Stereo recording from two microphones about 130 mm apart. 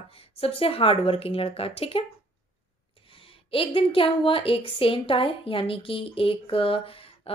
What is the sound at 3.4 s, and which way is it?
A woman's voice, 45° left (ahead or behind).